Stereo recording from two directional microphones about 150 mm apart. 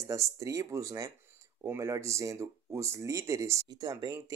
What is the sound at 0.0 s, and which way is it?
Speech, 20° right (ahead or behind).